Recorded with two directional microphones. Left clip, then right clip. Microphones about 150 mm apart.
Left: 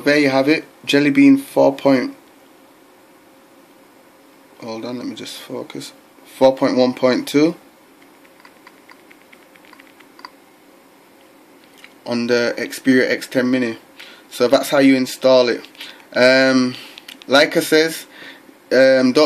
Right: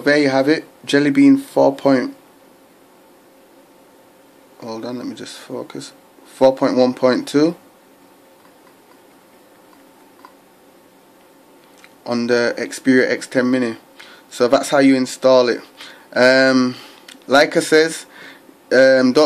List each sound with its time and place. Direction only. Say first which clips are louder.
0.0 s speech: even; centre (ahead or behind)
4.6 s speech: even; centre (ahead or behind)
11.8 s speech: right 1 dB; centre (ahead or behind)